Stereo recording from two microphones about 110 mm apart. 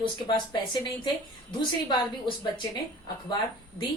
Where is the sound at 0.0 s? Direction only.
45° left (ahead or behind).